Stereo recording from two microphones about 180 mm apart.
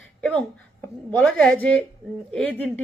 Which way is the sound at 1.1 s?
5° left (ahead or behind).